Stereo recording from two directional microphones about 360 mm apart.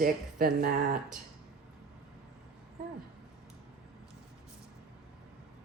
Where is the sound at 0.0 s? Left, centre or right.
Right.